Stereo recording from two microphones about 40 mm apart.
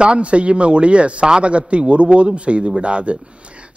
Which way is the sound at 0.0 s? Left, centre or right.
Right.